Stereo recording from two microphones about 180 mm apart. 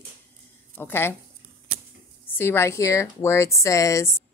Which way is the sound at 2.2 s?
10° left (ahead or behind).